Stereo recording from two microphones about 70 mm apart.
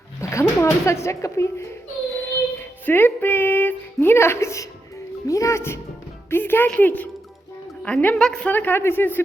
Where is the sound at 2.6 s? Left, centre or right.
Left.